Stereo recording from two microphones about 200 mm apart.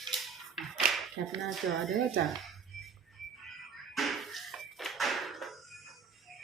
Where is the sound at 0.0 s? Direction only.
Centre (ahead or behind).